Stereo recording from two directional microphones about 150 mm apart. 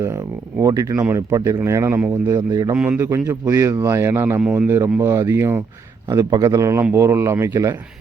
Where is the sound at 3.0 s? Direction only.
20° right (ahead or behind).